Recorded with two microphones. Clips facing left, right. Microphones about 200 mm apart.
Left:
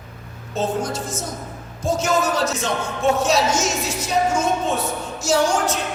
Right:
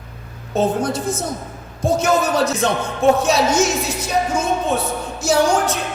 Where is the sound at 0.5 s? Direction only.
60° right (ahead or behind).